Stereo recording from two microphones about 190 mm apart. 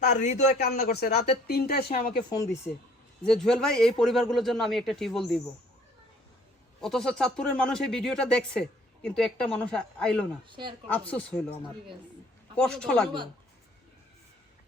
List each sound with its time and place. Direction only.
0.0 s a man's voice: 40° left (ahead or behind)
0.9 s speech: 55° left (ahead or behind)
2.3 s speech: 20° left (ahead or behind)
3.2 s speech: 5° left (ahead or behind)
6.8 s speech: centre (ahead or behind)
10.5 s speech: 25° right (ahead or behind)
10.8 s speech: 10° left (ahead or behind)
12.6 s speech: 5° left (ahead or behind)